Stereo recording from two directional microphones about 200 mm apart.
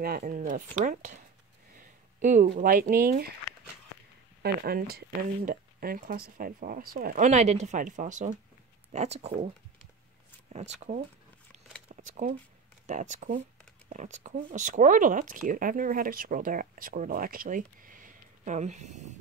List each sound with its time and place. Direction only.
0.0 s speech: 45° right (ahead or behind)
4.4 s speech: 50° right (ahead or behind); by 9.5 s 35° right (ahead or behind)
10.5 s speech: 30° right (ahead or behind)
11.9 s a sound: 40° right (ahead or behind)
12.8 s speech: 40° right (ahead or behind)